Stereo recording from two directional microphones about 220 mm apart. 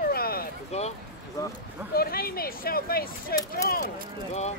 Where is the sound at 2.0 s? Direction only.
45° left (ahead or behind).